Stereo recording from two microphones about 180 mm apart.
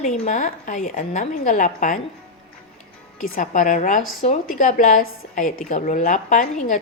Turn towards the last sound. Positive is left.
turn(degrees=40)  # may be behind; listen again after turning